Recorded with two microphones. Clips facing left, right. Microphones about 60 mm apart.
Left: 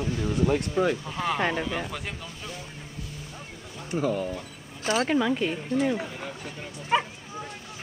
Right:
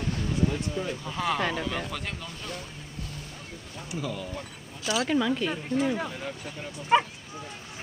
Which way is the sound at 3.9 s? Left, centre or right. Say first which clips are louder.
Left 7 dB; left.